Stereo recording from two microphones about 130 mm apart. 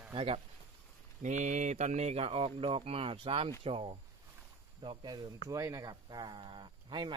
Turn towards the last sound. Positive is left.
turn(degrees=-35)  # may be behind; listen again after turning